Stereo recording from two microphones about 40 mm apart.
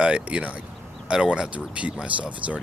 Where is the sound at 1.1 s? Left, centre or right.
Centre.